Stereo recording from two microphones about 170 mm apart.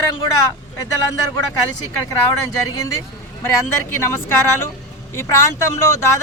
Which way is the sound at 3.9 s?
15° left (ahead or behind).